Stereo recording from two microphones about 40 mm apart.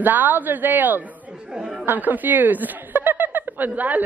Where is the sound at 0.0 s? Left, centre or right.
Right.